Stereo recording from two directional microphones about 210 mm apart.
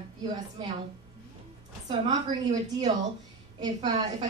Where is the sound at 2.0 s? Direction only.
20° right (ahead or behind).